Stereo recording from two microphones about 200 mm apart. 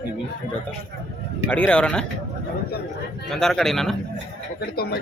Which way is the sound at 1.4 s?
5° left (ahead or behind).